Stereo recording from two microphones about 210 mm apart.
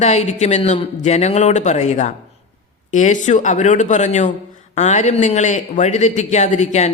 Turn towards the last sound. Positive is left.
turn(degrees=35)  # may be behind; listen again after turning